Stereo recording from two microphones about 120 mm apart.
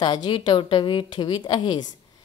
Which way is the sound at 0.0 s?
40° left (ahead or behind).